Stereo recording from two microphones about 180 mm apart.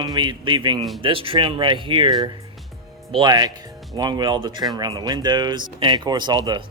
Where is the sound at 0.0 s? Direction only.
25° right (ahead or behind).